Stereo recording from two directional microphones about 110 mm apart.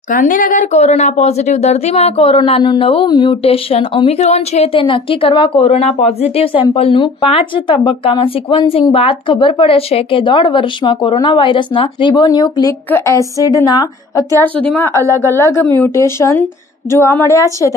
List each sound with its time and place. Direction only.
0.7 s a woman's voice: 90° left; by 3.1 s 55° left (ahead or behind)
3.1 s speech: 45° left (ahead or behind)
3.4 s speech: 55° left (ahead or behind)
4.2 s a woman's voice: 80° left
4.7 s speech: 50° left (ahead or behind)
10.2 s a woman's voice: 45° left (ahead or behind); by 14.2 s 30° left (ahead or behind)
14.4 s a woman's voice: 15° left (ahead or behind)
15.3 s a woman's voice: 25° left (ahead or behind)